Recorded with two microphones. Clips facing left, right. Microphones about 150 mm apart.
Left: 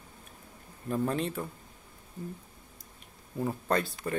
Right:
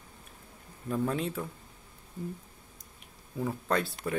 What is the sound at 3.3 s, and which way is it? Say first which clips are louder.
Speech: left 1 dB; centre (ahead or behind).